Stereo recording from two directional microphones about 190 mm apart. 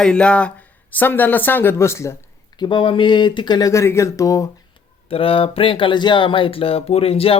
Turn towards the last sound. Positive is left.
turn(degrees=30)  # may be behind; listen again after turning